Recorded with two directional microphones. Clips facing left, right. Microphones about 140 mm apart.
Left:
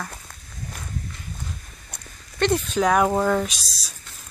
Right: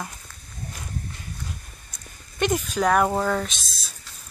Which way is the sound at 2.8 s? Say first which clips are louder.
Left 1 dB; 5° left (ahead or behind).